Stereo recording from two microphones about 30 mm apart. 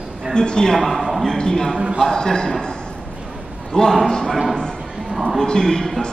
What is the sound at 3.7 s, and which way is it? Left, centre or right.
Speech, left.